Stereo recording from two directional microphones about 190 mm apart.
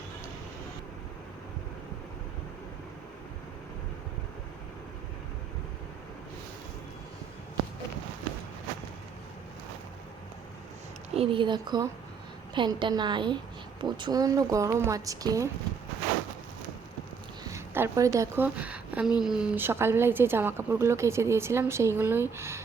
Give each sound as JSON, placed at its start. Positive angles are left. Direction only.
{"t": 11.1, "sound": "a woman's voice", "side_deg": -30}
{"t": 17.4, "sound": "a woman's voice", "side_deg": -15}